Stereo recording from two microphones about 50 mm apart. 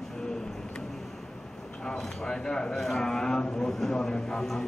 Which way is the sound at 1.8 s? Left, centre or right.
Centre.